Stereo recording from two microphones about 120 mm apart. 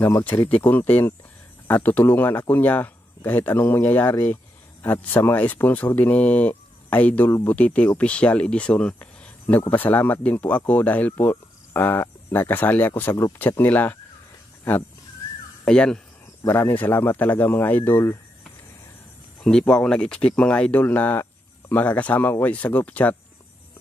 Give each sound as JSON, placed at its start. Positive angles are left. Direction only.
{"t": 0.0, "sound": "speech", "side_deg": 15}
{"t": 15.6, "sound": "speech", "side_deg": 5}
{"t": 16.4, "sound": "speech", "side_deg": 15}
{"t": 19.4, "sound": "speech", "side_deg": 5}